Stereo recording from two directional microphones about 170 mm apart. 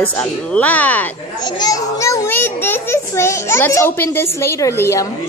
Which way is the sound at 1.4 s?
25° left (ahead or behind).